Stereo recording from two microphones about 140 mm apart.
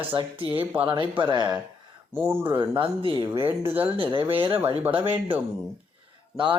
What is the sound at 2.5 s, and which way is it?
Speech, 35° right (ahead or behind).